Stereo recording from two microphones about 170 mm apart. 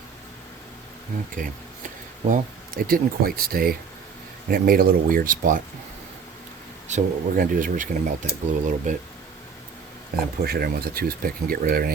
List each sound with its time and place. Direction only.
1.4 s speech: 55° right (ahead or behind)
6.8 s speech: 50° right (ahead or behind)
10.4 s speech: 65° right (ahead or behind)